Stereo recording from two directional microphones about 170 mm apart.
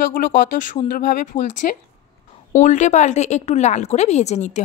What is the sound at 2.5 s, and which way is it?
Speech, 45° left (ahead or behind).